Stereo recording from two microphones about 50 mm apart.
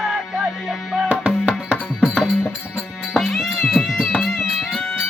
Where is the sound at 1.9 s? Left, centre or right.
Centre.